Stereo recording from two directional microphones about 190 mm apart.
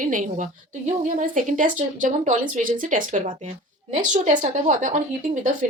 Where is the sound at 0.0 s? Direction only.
45° right (ahead or behind).